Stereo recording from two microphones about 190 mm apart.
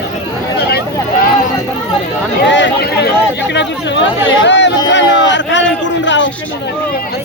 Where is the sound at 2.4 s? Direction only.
65° left (ahead or behind).